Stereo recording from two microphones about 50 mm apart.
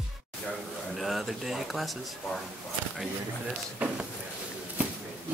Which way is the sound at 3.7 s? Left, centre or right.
Right.